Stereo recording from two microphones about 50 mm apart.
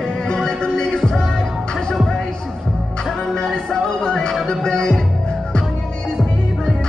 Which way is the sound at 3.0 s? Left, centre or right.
Centre.